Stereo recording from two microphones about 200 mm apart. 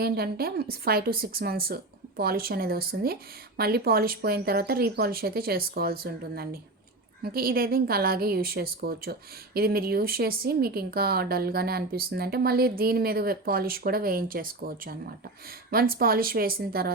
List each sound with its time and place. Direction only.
0.0 s speech: 50° right (ahead or behind)